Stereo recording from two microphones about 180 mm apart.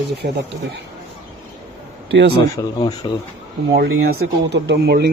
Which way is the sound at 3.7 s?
60° right (ahead or behind).